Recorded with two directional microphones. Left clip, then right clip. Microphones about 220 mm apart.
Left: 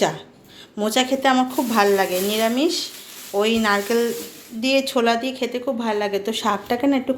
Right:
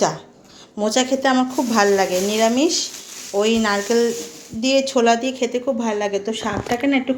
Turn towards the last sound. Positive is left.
turn(degrees=15)  # may be behind; listen again after turning